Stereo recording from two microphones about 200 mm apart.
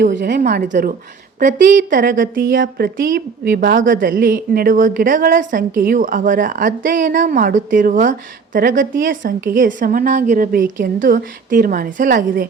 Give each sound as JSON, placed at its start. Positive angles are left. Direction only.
{"t": 0.0, "sound": "a woman's voice", "side_deg": -60}
{"t": 0.7, "sound": "a woman's voice", "side_deg": -40}